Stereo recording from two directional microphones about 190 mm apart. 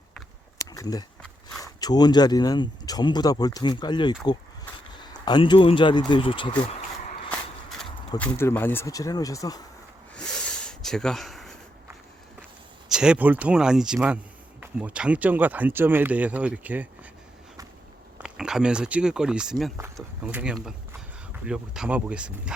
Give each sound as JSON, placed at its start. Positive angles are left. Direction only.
{"t": 0.6, "sound": "a sound", "side_deg": 15}
{"t": 1.6, "sound": "speech", "side_deg": 20}
{"t": 8.2, "sound": "speech", "side_deg": 10}
{"t": 10.2, "sound": "rub", "side_deg": 5}
{"t": 12.9, "sound": "speech", "side_deg": -5}
{"t": 18.2, "sound": "speech", "side_deg": -5}